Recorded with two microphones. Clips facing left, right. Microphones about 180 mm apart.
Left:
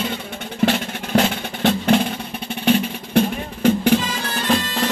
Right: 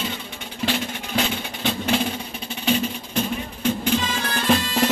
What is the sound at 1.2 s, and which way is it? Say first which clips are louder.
Music: left 6 dB; 55° left (ahead or behind).